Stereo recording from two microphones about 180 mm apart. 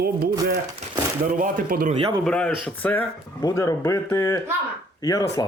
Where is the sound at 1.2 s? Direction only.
50° right (ahead or behind).